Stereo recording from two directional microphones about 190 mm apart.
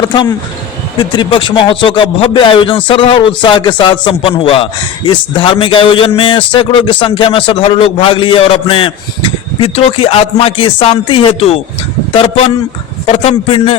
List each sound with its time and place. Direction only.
0.0 s a man's voice: 20° left (ahead or behind)